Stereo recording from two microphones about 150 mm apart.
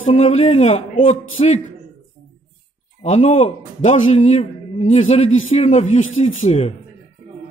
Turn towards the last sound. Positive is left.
turn(degrees=50)  # may be behind; listen again after turning